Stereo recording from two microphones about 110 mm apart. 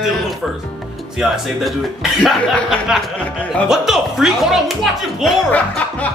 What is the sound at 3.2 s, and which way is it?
Speech, 10° left (ahead or behind).